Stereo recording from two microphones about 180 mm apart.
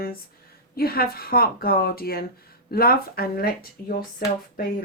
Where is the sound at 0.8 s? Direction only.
55° left (ahead or behind).